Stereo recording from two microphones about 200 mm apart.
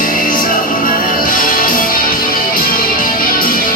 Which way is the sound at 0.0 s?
45° left (ahead or behind).